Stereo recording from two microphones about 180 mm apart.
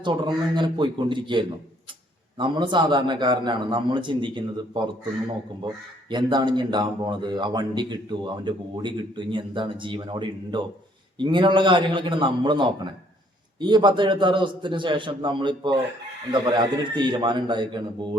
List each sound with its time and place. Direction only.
0.0 s speech: 25° right (ahead or behind)
6.1 s speech: 25° right (ahead or behind)